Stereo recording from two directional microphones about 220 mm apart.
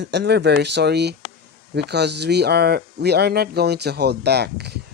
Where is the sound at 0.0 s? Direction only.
50° right (ahead or behind).